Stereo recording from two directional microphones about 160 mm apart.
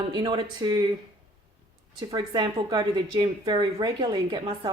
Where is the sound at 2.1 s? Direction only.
30° right (ahead or behind).